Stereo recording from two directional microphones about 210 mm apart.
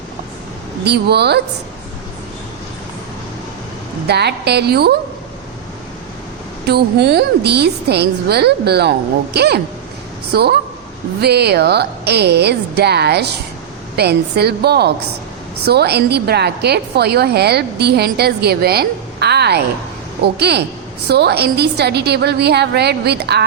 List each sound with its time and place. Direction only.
0.9 s a woman's voice: 50° right (ahead or behind)
4.0 s a woman's voice: 50° right (ahead or behind)
6.7 s a woman's voice: 50° right (ahead or behind)
11.2 s a woman's voice: 50° right (ahead or behind)